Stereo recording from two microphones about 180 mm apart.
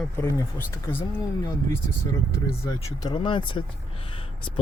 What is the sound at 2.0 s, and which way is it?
Speech, 20° left (ahead or behind).